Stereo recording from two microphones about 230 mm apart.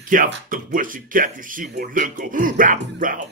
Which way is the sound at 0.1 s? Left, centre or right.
Right.